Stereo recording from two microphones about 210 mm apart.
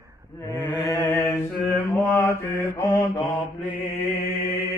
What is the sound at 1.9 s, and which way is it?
Mantra, centre (ahead or behind).